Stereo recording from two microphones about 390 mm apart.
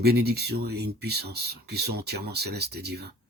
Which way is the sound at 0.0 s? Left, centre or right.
Right.